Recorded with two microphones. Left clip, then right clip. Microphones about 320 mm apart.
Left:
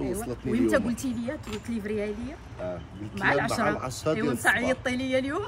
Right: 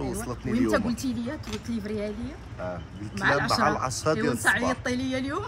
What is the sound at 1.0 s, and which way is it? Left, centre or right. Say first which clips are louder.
Speech: right 1 dB; centre.